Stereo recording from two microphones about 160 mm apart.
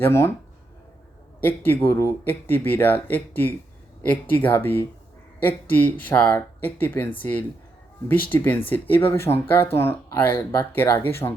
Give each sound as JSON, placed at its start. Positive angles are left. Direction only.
{"t": 0.0, "sound": "speech", "side_deg": 15}
{"t": 1.4, "sound": "speech", "side_deg": 10}